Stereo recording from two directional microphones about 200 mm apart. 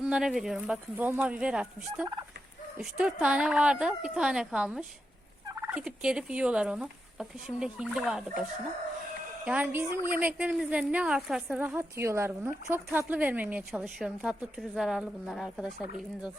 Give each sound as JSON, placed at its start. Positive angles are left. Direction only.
{"t": 0.0, "sound": "fowl", "side_deg": -5}
{"t": 9.4, "sound": "a woman's voice", "side_deg": -5}
{"t": 14.8, "sound": "fowl", "side_deg": 0}